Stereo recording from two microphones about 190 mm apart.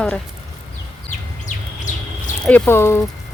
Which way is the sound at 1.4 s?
40° left (ahead or behind).